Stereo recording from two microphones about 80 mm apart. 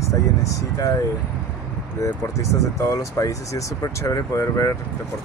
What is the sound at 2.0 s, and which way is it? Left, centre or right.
Speech, left.